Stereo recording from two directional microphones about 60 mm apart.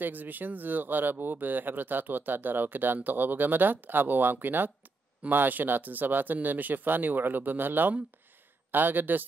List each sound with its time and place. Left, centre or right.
0.0 s speech: right